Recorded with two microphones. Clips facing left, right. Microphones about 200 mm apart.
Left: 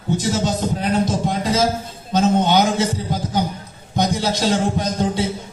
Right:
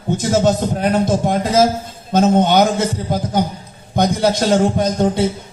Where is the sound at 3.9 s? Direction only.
55° right (ahead or behind).